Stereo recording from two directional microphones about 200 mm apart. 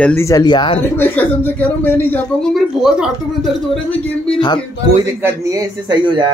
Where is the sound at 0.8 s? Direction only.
10° left (ahead or behind).